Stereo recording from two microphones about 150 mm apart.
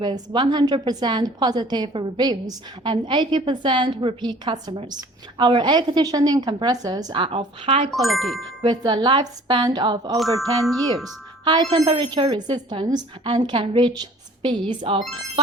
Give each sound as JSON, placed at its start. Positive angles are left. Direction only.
{"t": 0.0, "sound": "a woman's voice", "side_deg": -30}
{"t": 7.9, "sound": "speech", "side_deg": 0}
{"t": 8.6, "sound": "a woman's voice", "side_deg": -30}
{"t": 10.6, "sound": "speech", "side_deg": 0}
{"t": 11.4, "sound": "a woman's voice", "side_deg": -30}